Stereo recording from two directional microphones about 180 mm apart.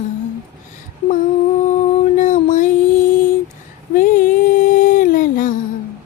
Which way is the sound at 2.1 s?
45° left (ahead or behind).